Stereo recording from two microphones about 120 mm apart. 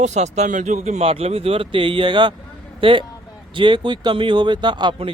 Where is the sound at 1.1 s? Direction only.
55° right (ahead or behind).